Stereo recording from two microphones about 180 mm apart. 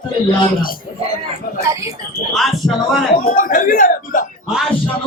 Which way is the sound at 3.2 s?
45° left (ahead or behind).